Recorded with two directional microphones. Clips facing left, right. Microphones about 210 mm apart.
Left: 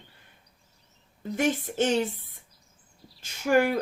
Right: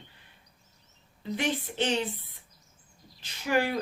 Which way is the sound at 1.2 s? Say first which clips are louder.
Left 4 dB; 45° left (ahead or behind).